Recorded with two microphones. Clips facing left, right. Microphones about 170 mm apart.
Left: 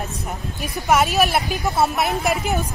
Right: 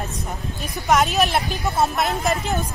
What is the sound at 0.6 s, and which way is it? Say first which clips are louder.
Speech: left 1 dB; centre (ahead or behind).